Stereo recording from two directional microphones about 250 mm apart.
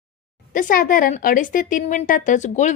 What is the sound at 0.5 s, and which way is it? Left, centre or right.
Speech, left.